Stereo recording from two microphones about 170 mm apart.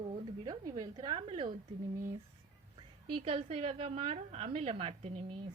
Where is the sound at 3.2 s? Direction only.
35° right (ahead or behind).